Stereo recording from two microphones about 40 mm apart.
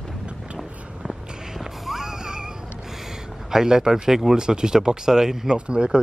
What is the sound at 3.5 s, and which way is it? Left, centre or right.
Speech, centre.